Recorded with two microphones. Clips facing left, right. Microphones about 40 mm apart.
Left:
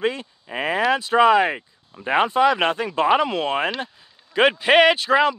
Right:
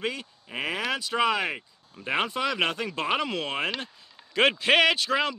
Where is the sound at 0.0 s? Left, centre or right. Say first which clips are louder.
Left 8 dB; centre.